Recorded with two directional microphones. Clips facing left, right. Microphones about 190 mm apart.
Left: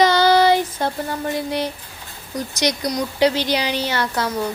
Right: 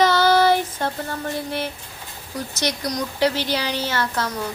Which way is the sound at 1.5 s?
15° left (ahead or behind).